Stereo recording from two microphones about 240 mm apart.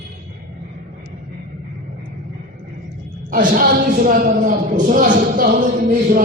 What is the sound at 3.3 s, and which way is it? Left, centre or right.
A woman's voice, right.